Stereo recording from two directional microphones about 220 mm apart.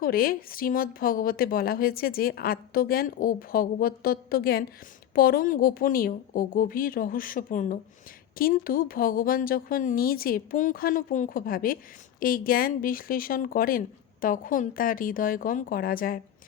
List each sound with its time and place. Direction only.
0.0 s speech: 40° left (ahead or behind)